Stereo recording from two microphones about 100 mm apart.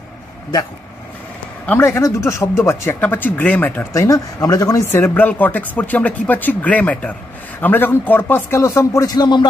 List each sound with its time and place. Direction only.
1.7 s speech: 25° left (ahead or behind)
3.9 s speech: 35° left (ahead or behind)
4.9 s speech: 20° left (ahead or behind); by 9.5 s 45° left (ahead or behind)